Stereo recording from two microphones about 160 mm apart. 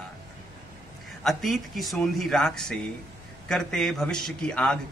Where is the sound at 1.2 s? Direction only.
Centre (ahead or behind).